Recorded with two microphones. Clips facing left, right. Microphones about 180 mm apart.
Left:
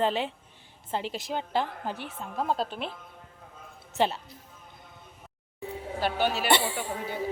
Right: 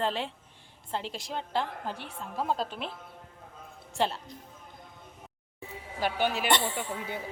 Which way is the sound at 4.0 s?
Centre (ahead or behind).